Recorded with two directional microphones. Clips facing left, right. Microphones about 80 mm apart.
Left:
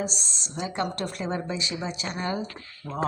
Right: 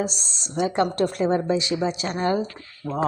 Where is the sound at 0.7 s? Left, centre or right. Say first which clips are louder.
Right 6 dB; right.